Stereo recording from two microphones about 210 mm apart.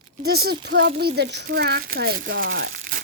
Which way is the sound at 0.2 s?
50° right (ahead or behind).